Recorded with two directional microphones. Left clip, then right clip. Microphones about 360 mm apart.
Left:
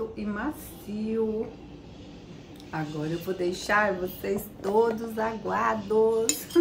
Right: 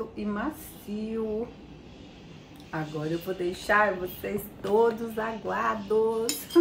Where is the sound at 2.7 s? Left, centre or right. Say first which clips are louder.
Even; centre.